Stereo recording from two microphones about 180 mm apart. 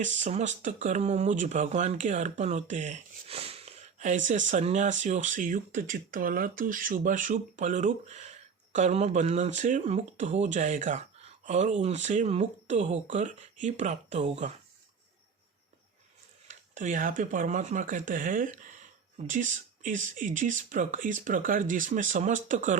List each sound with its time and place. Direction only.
0.0 s speech: 40° right (ahead or behind)
16.5 s speech: 45° right (ahead or behind)